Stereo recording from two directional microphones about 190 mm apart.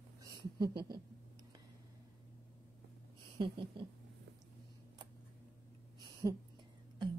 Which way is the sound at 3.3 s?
25° right (ahead or behind).